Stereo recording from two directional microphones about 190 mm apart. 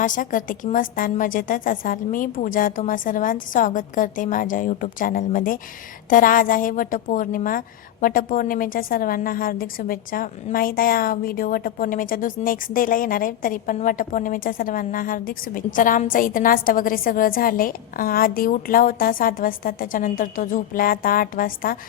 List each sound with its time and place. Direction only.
0.0 s a woman's voice: 45° left (ahead or behind)